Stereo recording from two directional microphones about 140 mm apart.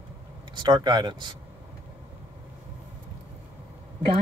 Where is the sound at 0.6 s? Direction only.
35° right (ahead or behind).